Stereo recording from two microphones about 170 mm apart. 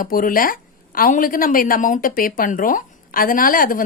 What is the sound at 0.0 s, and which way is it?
Speech, 55° left (ahead or behind).